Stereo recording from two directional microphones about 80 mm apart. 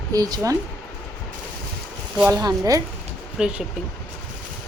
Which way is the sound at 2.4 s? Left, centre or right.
Right.